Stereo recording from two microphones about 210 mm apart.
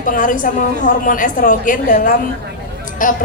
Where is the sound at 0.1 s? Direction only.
40° left (ahead or behind).